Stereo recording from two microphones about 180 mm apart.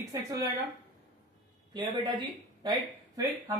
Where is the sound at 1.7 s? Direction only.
25° right (ahead or behind).